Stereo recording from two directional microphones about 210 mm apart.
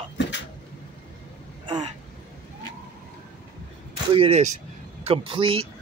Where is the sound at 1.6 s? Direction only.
30° right (ahead or behind).